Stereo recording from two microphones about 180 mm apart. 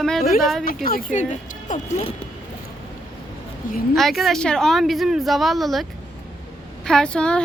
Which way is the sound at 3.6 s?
50° left (ahead or behind).